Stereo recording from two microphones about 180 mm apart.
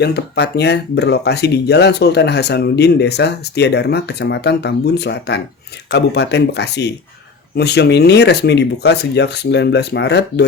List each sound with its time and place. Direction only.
0.0 s speech: 65° left (ahead or behind)